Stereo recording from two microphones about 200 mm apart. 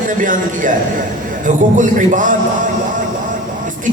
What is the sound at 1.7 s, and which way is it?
Speech, 40° right (ahead or behind).